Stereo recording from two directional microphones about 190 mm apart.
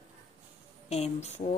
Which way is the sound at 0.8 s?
35° left (ahead or behind).